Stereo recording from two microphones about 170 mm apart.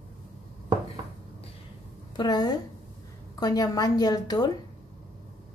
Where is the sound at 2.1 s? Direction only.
25° left (ahead or behind).